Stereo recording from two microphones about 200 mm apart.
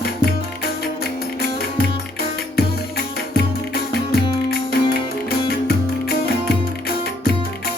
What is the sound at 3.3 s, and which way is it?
Music, 50° left (ahead or behind).